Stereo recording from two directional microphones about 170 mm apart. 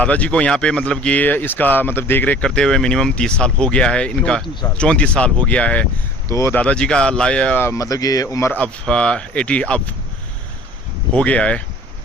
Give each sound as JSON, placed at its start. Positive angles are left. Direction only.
{"t": 0.0, "sound": "speech", "side_deg": 10}
{"t": 6.2, "sound": "speech", "side_deg": 15}
{"t": 11.1, "sound": "speech", "side_deg": 5}